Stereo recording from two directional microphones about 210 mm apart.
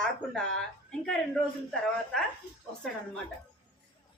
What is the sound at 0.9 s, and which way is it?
Speech, 5° left (ahead or behind).